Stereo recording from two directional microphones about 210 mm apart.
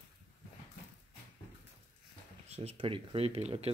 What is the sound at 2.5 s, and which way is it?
Speech, 30° right (ahead or behind).